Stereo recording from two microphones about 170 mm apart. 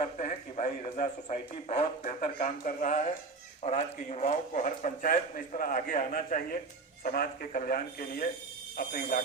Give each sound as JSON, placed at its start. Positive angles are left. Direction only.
{"t": 0.0, "sound": "a man's voice", "side_deg": 45}